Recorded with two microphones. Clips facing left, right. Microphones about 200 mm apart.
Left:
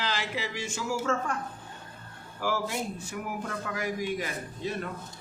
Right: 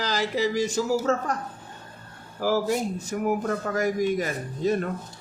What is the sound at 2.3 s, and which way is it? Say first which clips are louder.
Speech: right 7 dB; 40° right (ahead or behind).